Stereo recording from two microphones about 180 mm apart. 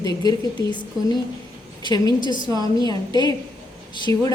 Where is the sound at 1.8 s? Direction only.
25° left (ahead or behind).